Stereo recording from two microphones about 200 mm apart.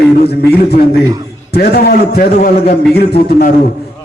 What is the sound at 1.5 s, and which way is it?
A man's voice, 50° left (ahead or behind).